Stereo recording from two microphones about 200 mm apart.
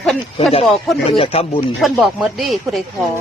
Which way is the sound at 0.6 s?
Centre (ahead or behind).